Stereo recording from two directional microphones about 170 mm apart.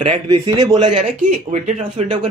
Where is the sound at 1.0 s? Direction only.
40° right (ahead or behind).